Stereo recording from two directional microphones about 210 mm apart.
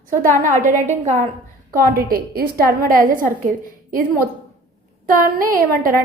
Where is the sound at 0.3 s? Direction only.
40° right (ahead or behind).